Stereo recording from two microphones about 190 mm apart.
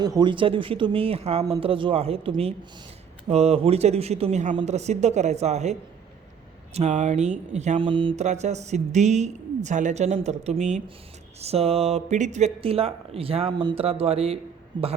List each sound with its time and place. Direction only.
0.0 s speech: 20° right (ahead or behind)
6.7 s speech: 35° right (ahead or behind)